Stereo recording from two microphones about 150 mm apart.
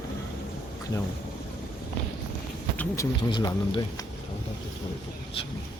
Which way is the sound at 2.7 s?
20° left (ahead or behind).